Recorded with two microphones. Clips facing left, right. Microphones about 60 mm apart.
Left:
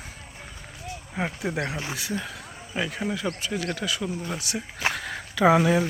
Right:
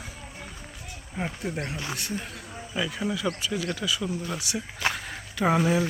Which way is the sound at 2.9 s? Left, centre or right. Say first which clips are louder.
Even; left.